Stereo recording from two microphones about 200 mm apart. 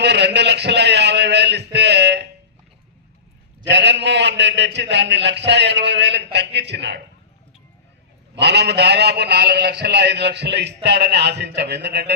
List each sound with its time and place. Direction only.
0.0 s a sound: 55° right (ahead or behind)
3.7 s a man's voice: 60° right (ahead or behind)
8.4 s a man's voice: 60° right (ahead or behind)